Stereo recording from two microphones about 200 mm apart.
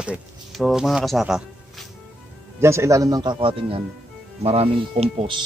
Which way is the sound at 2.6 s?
15° right (ahead or behind).